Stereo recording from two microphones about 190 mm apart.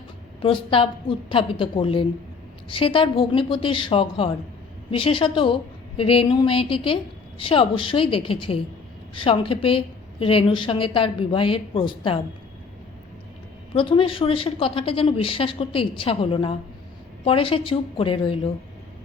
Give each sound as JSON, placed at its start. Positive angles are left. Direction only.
{"t": 0.4, "sound": "a woman's voice", "side_deg": 30}
{"t": 13.7, "sound": "a woman's voice", "side_deg": 25}